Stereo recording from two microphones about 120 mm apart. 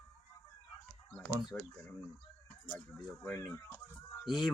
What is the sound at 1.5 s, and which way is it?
Speech, 20° left (ahead or behind).